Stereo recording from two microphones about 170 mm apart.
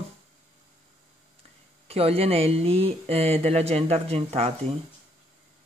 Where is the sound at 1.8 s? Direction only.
35° right (ahead or behind).